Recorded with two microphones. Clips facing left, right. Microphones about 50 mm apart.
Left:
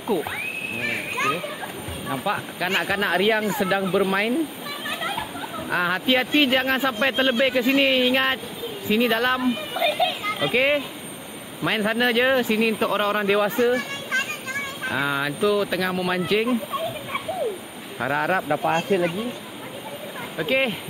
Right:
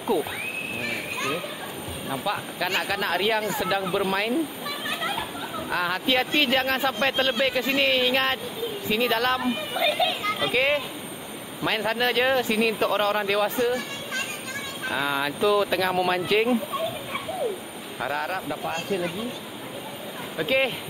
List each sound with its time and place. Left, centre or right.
0.1 s speech: centre
0.7 s children playing: left
2.0 s speech: centre
4.8 s a sound: centre
5.7 s a child's voice: centre
13.5 s speech: left
13.7 s children playing: left
14.9 s speech: centre
17.9 s speech: centre
18.3 s speech: left
20.3 s speech: centre